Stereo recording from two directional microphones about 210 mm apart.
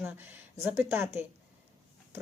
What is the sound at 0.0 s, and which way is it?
Speech, 10° right (ahead or behind).